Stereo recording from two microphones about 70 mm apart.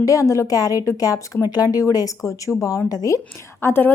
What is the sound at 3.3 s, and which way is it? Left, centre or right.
Speech, left.